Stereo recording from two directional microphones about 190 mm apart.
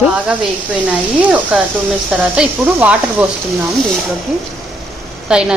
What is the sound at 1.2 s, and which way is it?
Speech, 5° right (ahead or behind).